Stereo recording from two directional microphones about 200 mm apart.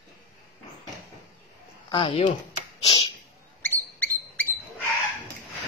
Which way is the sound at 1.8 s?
25° left (ahead or behind).